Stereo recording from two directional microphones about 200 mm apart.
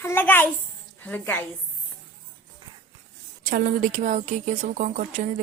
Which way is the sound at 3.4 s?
40° right (ahead or behind).